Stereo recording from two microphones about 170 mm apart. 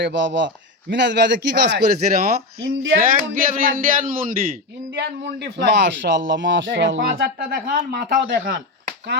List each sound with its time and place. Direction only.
0.0 s a man's voice: 90° right; by 4.4 s 55° right (ahead or behind)
4.9 s a man's voice: 85° right; by 8.6 s 60° right (ahead or behind)